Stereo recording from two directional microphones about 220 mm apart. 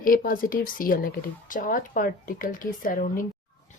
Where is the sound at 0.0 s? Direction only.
40° left (ahead or behind).